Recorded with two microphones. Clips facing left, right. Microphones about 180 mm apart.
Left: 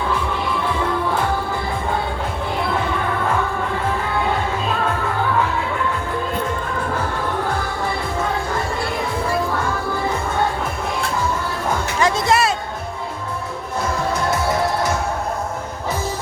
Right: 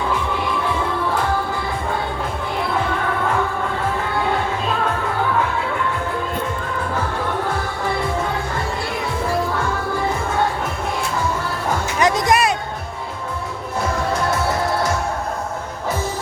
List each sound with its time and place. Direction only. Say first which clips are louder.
11.9 s music: right 1 dB; 20° right (ahead or behind)